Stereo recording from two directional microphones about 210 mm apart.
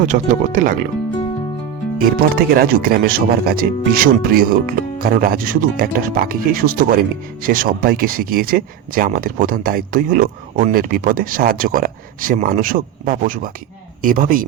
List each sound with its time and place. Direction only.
0.1 s speech: 35° right (ahead or behind)
2.0 s speech: 45° right (ahead or behind)